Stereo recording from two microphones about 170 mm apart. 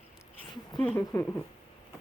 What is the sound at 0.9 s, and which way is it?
Speech, 15° left (ahead or behind).